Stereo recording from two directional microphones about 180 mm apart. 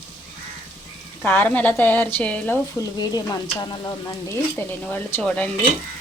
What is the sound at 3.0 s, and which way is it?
Speech, 20° left (ahead or behind).